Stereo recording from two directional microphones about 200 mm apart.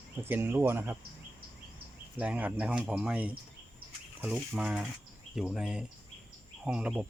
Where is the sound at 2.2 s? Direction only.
5° right (ahead or behind).